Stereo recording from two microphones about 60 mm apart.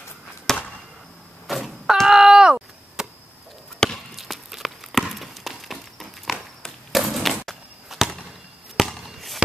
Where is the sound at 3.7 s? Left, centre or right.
Centre.